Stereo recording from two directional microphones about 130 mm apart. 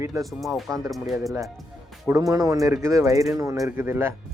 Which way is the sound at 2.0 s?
25° right (ahead or behind).